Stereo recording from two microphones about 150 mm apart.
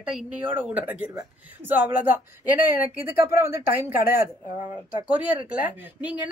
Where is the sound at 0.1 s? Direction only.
10° right (ahead or behind).